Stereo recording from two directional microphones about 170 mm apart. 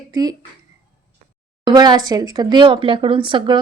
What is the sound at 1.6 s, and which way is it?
A woman's voice, 25° right (ahead or behind).